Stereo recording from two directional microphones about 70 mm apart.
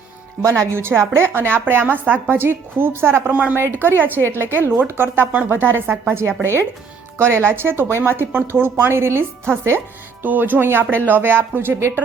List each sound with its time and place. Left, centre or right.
0.4 s a woman's voice: right